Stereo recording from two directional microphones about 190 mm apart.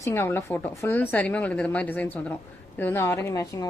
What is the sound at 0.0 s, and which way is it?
A woman's voice, 10° left (ahead or behind).